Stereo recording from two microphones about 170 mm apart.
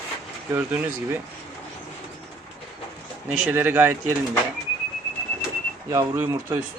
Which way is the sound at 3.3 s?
5° right (ahead or behind).